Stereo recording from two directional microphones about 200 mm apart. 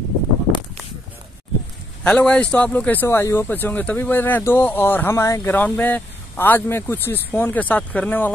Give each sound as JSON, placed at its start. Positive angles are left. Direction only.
{"t": 2.0, "sound": "speech", "side_deg": 5}